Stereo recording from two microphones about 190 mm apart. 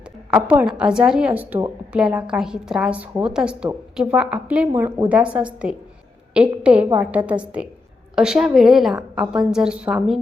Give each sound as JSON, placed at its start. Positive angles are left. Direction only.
{"t": 0.3, "sound": "a woman's voice", "side_deg": -5}
{"t": 6.8, "sound": "a woman's voice", "side_deg": -15}
{"t": 7.6, "sound": "a woman's voice", "side_deg": -5}